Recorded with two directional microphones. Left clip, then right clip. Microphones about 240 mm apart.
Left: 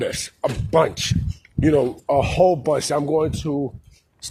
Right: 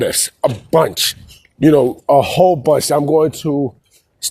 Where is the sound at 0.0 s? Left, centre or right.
Right.